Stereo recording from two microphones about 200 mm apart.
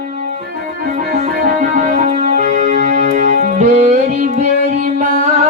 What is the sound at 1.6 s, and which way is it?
Music, 40° right (ahead or behind).